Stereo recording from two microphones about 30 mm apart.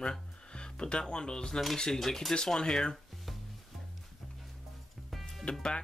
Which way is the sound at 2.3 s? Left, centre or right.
Left.